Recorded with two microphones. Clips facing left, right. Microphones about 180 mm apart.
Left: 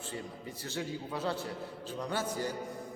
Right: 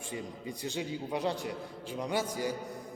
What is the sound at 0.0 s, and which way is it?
A man's voice, 15° right (ahead or behind).